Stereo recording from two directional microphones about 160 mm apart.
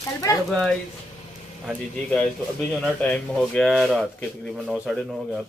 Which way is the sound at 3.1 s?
5° left (ahead or behind).